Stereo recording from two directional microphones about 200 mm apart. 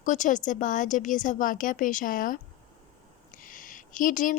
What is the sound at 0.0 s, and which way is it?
A woman's voice, 40° left (ahead or behind).